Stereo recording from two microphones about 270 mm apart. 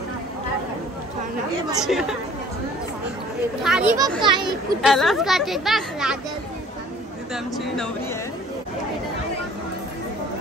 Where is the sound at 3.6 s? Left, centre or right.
Centre.